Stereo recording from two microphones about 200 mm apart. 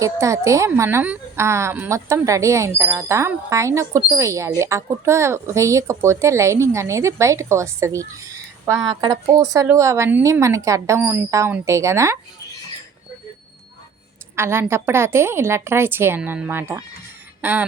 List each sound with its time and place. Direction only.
0.0 s a woman's voice: 15° right (ahead or behind)
14.3 s a woman's voice: 10° right (ahead or behind)